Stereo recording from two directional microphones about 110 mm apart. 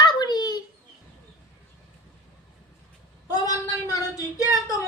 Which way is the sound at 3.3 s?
35° left (ahead or behind).